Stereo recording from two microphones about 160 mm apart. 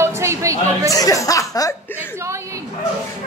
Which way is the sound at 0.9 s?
20° left (ahead or behind).